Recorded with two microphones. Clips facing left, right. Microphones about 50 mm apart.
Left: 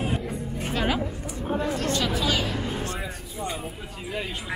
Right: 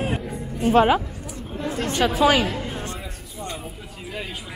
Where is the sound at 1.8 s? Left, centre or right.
Right.